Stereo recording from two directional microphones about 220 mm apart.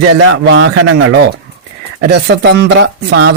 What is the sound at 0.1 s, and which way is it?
Speech, 60° right (ahead or behind).